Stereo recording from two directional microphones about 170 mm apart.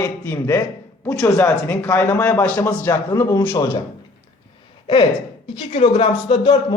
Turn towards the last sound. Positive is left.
turn(degrees=25)  # may be behind; listen again after turning